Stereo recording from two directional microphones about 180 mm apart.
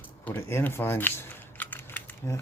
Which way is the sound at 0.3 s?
15° left (ahead or behind).